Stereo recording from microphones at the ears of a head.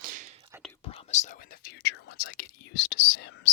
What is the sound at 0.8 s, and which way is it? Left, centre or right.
Whispering, left.